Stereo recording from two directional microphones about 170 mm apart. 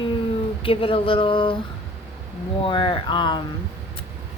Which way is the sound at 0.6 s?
30° left (ahead or behind).